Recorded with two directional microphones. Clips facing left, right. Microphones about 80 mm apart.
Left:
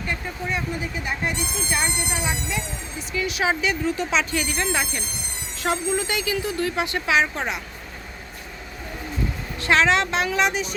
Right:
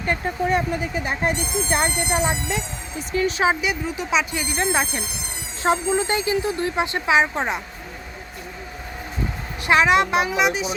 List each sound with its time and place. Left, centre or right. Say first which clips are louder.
0.0 s speech: right 6 dB; right
3.1 s speech: right 4 dB; right
3.5 s a woman's voice: left 1 dB; centre
4.4 s speech: right 2 dB; right
9.6 s a woman's voice: right 2 dB; centre